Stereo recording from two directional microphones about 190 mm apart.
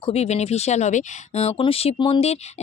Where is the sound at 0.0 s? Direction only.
35° left (ahead or behind).